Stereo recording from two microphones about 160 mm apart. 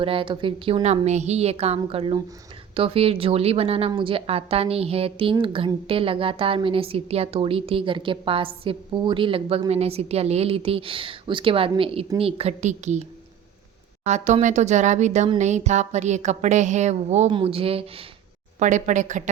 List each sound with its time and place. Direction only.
0.0 s a woman's voice: 35° right (ahead or behind)
14.0 s a woman's voice: 45° right (ahead or behind)
18.6 s speech: 50° right (ahead or behind)